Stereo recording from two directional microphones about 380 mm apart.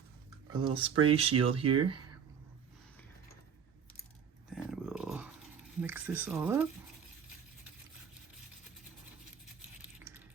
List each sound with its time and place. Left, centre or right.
0.5 s speech: centre
1.3 s speech: right
4.5 s a sound: centre
5.8 s speech: centre